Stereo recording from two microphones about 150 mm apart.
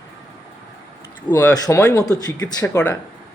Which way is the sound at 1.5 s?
20° left (ahead or behind).